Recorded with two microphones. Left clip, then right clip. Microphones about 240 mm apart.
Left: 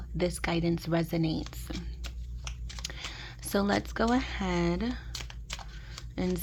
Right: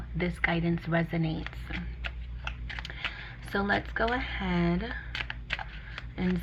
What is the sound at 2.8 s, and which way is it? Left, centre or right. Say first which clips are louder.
Typing: right 1 dB; left.